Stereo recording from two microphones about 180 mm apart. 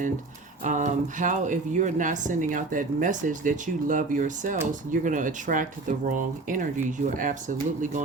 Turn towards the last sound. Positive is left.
turn(degrees=-45)  # may be behind; listen again after turning